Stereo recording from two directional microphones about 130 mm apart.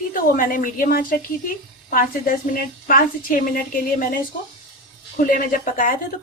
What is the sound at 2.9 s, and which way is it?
A woman's voice, 90° left.